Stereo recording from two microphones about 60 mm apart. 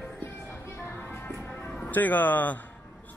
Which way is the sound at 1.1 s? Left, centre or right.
Left.